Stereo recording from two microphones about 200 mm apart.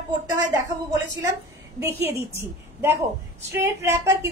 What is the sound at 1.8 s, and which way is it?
Speech, 10° right (ahead or behind).